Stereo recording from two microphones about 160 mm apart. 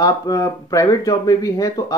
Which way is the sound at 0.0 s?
20° left (ahead or behind).